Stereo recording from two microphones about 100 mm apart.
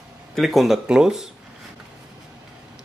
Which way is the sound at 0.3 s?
Centre (ahead or behind).